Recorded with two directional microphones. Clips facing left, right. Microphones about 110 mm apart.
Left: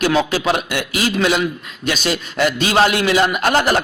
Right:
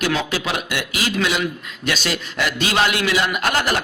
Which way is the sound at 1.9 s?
20° left (ahead or behind).